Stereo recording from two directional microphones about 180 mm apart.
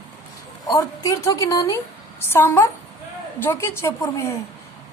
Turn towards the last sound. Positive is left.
turn(degrees=15)  # may be behind; listen again after turning